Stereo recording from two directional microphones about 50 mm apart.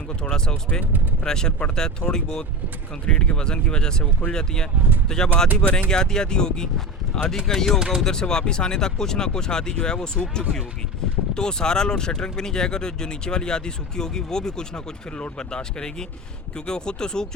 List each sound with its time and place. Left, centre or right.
0.2 s speech: centre